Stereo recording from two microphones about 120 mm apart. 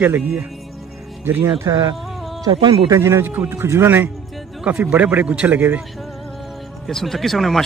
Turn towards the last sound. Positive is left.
turn(degrees=0)  # may be behind; listen again after turning